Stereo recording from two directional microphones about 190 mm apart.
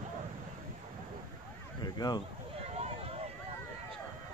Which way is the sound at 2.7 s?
35° right (ahead or behind).